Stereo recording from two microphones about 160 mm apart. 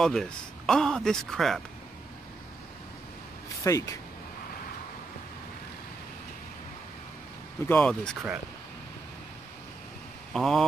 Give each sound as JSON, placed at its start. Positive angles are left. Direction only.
{"t": 0.0, "sound": "speech", "side_deg": 5}
{"t": 3.6, "sound": "speech", "side_deg": 20}
{"t": 7.6, "sound": "speech", "side_deg": 10}
{"t": 10.3, "sound": "speech", "side_deg": 0}